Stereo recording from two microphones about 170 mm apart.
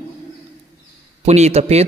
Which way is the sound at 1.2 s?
40° right (ahead or behind).